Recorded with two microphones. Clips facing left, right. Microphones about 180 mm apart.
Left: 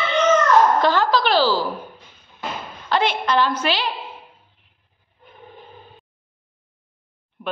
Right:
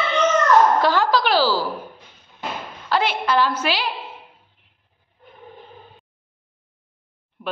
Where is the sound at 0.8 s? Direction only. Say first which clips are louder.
Even; 10° right (ahead or behind).